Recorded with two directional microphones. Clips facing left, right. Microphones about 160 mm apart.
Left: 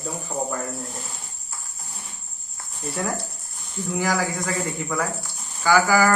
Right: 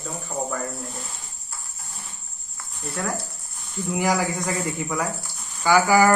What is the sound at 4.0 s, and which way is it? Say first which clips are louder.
A man's voice: right 1 dB; 20° right (ahead or behind).